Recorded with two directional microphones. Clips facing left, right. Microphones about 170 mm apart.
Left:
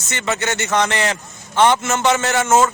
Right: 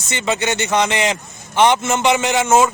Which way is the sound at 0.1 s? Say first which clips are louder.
Right 2 dB; 15° right (ahead or behind).